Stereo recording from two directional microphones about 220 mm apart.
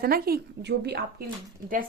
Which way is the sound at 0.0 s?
45° right (ahead or behind).